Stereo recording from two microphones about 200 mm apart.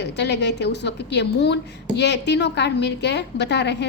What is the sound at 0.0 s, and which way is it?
A woman's voice, 60° left (ahead or behind).